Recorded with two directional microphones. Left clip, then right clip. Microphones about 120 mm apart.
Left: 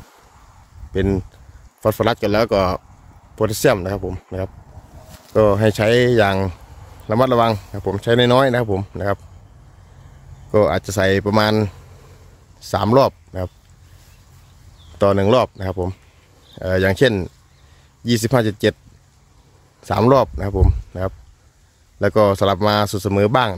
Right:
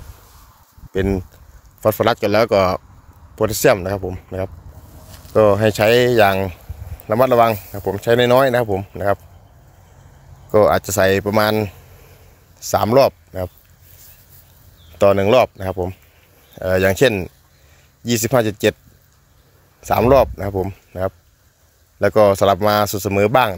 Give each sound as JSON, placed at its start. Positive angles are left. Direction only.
{"t": 0.9, "sound": "speech", "side_deg": 20}
{"t": 10.5, "sound": "speech", "side_deg": 15}
{"t": 12.5, "sound": "speech", "side_deg": 20}
{"t": 15.0, "sound": "speech", "side_deg": 25}
{"t": 19.8, "sound": "speech", "side_deg": 25}